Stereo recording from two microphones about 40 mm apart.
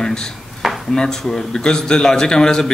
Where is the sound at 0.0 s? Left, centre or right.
Centre.